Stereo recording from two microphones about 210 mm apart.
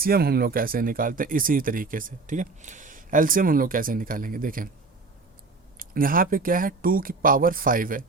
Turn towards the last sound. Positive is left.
turn(degrees=-40)  # may be behind; listen again after turning